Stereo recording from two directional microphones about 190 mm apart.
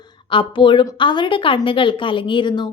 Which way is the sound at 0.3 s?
25° left (ahead or behind).